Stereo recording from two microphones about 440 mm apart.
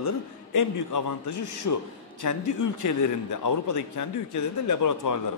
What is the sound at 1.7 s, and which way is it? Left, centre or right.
A man's voice, left.